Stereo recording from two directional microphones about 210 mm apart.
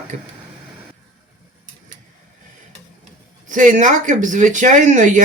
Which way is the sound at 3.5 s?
35° right (ahead or behind).